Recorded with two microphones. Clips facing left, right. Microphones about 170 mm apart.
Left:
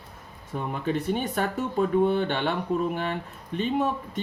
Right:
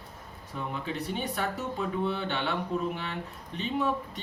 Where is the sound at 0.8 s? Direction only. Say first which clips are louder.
Left 9 dB; 50° left (ahead or behind).